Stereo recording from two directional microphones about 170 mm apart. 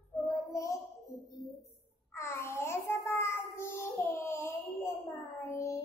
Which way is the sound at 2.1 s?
15° left (ahead or behind).